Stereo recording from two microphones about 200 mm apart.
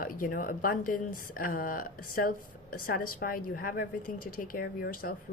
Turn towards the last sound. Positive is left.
turn(degrees=45)  # may be behind; listen again after turning